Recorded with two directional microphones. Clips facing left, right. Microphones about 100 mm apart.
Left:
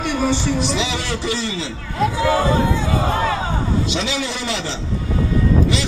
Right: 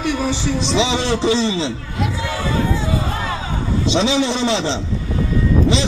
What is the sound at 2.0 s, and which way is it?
Speech, 35° left (ahead or behind).